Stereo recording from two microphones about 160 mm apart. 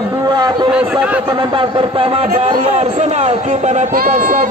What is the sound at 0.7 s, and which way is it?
Speech, 5° right (ahead or behind).